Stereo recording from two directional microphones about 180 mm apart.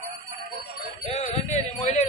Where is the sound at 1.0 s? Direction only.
35° left (ahead or behind).